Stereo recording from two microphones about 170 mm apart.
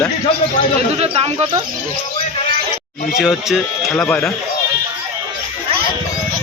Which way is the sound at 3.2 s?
Centre (ahead or behind).